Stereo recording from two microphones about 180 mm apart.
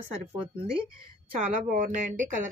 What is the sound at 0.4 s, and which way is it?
Speech, 30° right (ahead or behind).